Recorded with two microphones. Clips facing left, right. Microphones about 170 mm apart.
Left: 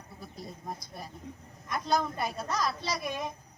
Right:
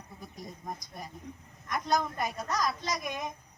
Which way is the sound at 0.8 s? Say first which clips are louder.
Even; 15° right (ahead or behind).